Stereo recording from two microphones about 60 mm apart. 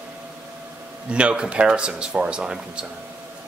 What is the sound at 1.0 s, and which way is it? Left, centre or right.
Speech, centre.